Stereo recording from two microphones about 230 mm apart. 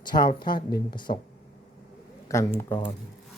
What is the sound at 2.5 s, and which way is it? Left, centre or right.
Speech, centre.